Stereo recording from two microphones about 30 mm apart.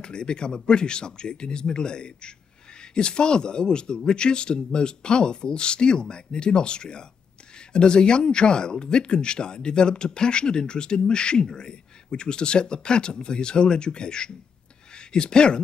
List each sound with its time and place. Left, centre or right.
0.0 s speech: left